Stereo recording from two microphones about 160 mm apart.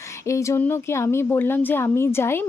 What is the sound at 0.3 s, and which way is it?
Speech, 20° left (ahead or behind).